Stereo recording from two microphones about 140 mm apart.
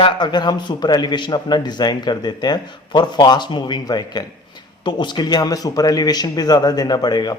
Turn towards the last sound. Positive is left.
turn(degrees=30)  # may be behind; listen again after turning